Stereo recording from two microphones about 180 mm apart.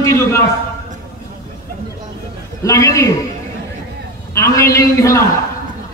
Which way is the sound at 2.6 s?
20° left (ahead or behind).